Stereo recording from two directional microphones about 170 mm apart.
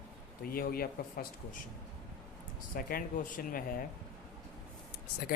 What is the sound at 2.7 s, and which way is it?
Speech, 55° left (ahead or behind).